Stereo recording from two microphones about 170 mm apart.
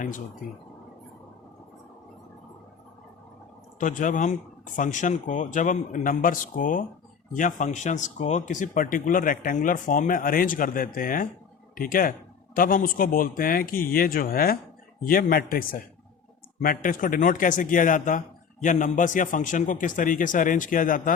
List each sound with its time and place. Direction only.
3.8 s speech: 50° left (ahead or behind)